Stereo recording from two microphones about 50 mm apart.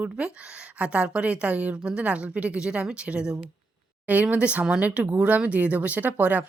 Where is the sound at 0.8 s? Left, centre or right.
Right.